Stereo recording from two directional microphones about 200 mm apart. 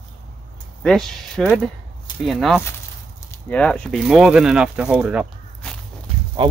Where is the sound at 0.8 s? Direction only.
5° left (ahead or behind).